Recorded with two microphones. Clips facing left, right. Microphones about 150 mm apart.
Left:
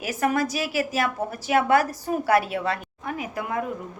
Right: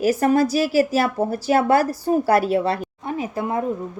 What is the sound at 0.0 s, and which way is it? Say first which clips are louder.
A woman's voice: right 7 dB; 35° right (ahead or behind).